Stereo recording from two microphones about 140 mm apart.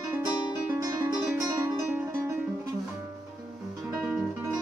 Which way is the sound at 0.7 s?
20° right (ahead or behind).